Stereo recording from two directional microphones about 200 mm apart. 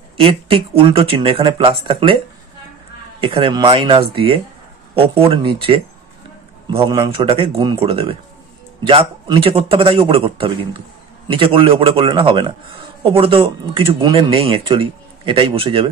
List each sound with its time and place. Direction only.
0.2 s a man's voice: 25° right (ahead or behind)
3.2 s a man's voice: 25° right (ahead or behind)